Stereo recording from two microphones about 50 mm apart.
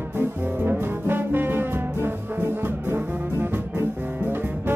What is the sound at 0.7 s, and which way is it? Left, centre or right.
Brass instrument, right.